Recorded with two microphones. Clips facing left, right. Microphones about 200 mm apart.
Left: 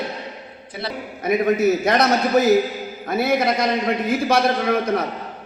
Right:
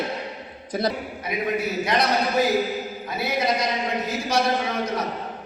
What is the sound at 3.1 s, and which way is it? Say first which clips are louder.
Speech: left 6 dB; 50° left (ahead or behind).